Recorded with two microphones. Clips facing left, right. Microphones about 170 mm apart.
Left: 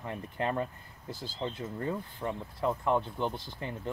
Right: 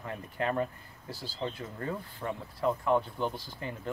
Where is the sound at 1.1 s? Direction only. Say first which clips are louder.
Even; 20° left (ahead or behind).